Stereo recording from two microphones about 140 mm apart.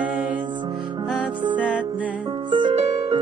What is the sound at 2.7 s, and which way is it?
Music, 50° right (ahead or behind).